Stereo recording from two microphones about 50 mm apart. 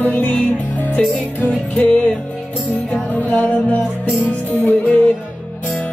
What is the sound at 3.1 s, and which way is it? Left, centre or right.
Music, left.